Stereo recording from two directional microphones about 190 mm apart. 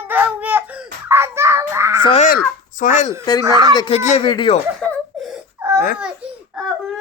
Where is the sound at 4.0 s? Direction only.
40° left (ahead or behind).